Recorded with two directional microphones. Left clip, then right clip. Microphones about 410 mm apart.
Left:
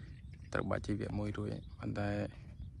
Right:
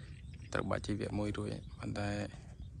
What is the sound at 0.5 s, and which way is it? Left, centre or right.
Speech, centre.